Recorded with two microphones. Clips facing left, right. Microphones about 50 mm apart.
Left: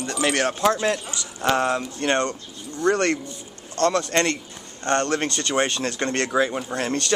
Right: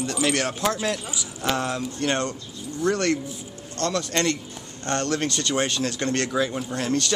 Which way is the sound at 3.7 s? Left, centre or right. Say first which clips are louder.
Left 5 dB; left.